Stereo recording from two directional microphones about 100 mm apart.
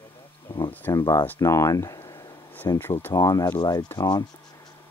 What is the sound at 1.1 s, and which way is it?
Speech, 25° left (ahead or behind).